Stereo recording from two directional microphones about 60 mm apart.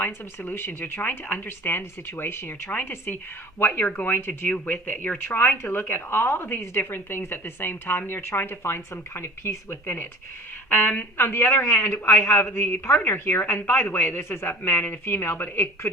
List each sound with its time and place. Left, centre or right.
0.0 s a woman's voice: left
10.7 s a woman's voice: left